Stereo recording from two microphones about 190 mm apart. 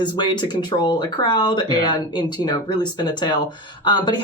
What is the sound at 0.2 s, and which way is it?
Speech, 25° left (ahead or behind).